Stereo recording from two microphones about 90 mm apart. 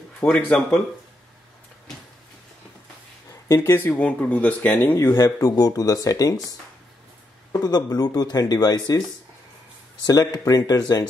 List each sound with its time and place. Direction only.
0.2 s speech: 15° left (ahead or behind)
3.4 s speech: 30° left (ahead or behind)
5.1 s speech: 40° left (ahead or behind)
7.6 s speech: 45° left (ahead or behind)
10.0 s speech: 45° left (ahead or behind)